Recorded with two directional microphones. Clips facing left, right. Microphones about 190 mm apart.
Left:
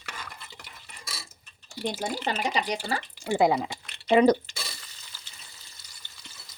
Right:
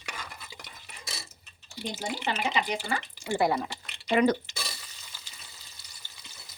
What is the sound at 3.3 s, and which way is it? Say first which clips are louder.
Speech: left 4 dB; 20° left (ahead or behind).